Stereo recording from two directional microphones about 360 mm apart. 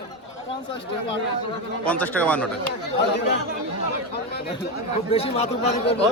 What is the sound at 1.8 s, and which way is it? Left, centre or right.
Speech, centre.